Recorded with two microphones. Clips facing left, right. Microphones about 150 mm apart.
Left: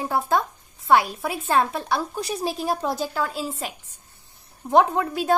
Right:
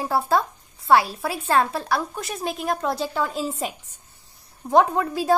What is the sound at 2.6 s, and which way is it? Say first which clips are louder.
A woman's voice: right 3 dB; 5° left (ahead or behind).